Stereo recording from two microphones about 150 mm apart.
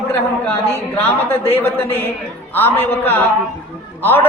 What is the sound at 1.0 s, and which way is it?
A man's voice, 15° left (ahead or behind).